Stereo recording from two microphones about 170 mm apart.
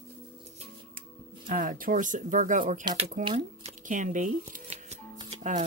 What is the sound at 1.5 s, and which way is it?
Speech, 55° right (ahead or behind).